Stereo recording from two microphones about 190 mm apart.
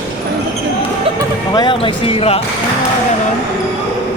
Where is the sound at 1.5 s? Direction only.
25° left (ahead or behind).